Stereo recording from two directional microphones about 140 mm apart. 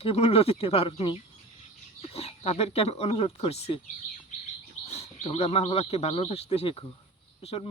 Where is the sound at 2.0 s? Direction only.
45° left (ahead or behind).